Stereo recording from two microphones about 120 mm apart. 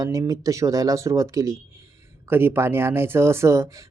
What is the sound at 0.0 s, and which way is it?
Speech, 30° right (ahead or behind).